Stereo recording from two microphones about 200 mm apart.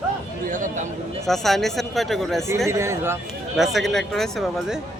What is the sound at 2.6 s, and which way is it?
Speech, 15° right (ahead or behind).